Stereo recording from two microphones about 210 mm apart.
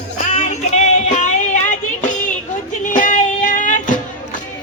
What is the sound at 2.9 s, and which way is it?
Music, 40° left (ahead or behind).